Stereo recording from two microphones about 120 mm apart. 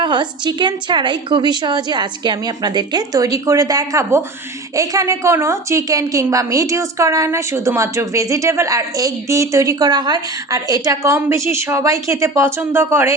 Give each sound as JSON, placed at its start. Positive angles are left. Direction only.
{"t": 0.0, "sound": "a woman's voice", "side_deg": -40}